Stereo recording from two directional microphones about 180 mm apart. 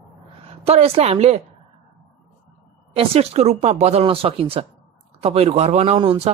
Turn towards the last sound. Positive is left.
turn(degrees=-30)  # may be behind; listen again after turning